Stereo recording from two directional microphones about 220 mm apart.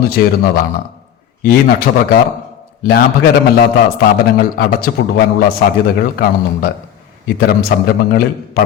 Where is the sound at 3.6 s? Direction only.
40° left (ahead or behind).